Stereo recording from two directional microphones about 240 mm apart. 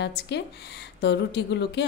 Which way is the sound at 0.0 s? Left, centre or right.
Left.